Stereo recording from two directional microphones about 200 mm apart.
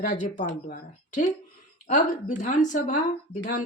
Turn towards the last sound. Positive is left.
turn(degrees=40)  # may be behind; listen again after turning